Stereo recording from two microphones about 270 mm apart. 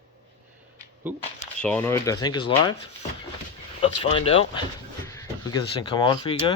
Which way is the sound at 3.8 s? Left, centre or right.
Centre.